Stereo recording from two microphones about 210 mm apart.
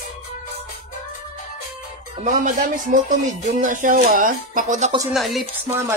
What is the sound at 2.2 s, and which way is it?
Speech, 40° right (ahead or behind).